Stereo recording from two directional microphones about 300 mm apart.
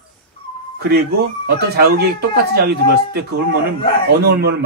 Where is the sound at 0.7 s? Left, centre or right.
Right.